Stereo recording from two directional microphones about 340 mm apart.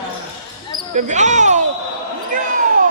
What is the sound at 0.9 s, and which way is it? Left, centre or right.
Speech, right.